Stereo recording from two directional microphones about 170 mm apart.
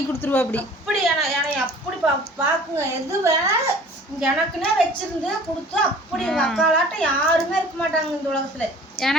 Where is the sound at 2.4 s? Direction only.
15° right (ahead or behind).